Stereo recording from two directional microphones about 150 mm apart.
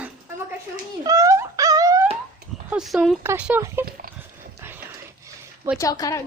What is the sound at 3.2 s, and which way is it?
Speech, 10° right (ahead or behind).